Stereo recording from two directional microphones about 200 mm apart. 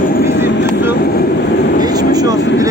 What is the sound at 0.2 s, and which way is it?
Vehicle, 55° left (ahead or behind).